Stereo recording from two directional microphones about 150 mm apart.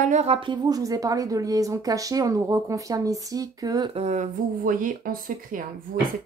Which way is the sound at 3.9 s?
50° right (ahead or behind).